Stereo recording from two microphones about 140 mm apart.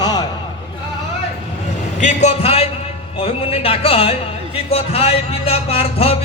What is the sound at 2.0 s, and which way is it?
Speech, 55° left (ahead or behind).